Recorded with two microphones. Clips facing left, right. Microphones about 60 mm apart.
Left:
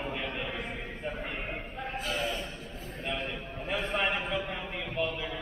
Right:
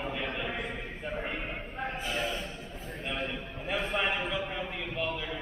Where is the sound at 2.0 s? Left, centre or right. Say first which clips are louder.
Left 2 dB; centre.